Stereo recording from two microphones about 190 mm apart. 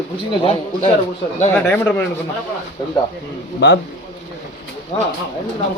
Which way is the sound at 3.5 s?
65° left (ahead or behind).